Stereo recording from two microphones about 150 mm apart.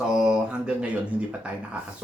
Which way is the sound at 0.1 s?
5° right (ahead or behind).